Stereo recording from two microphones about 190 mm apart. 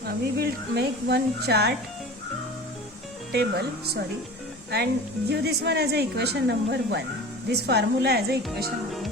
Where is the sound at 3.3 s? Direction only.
60° right (ahead or behind).